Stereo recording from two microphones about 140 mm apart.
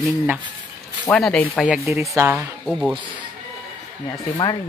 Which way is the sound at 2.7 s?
Centre (ahead or behind).